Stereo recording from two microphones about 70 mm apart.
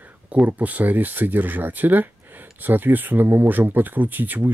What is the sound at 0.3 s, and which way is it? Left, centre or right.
Speech, right.